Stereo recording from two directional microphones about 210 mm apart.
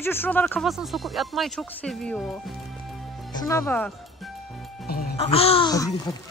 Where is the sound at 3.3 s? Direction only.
15° left (ahead or behind).